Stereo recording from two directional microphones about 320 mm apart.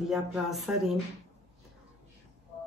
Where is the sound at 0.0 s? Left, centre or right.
Centre.